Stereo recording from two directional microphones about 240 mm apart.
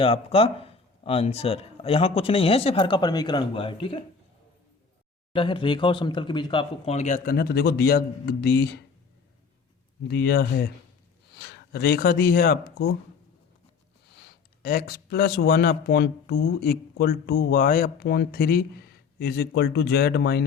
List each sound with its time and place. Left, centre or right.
0.0 s speech: left
5.3 s speech: left
10.1 s speech: left
14.1 s speech: left